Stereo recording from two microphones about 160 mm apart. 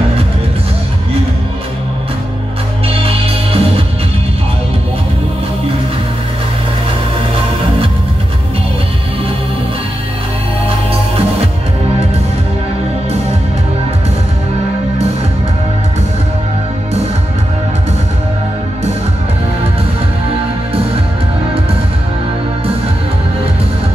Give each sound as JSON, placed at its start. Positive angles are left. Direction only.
{"t": 2.9, "sound": "music", "side_deg": -35}